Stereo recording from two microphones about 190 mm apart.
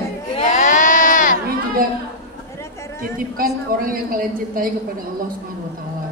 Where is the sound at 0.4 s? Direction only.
40° left (ahead or behind).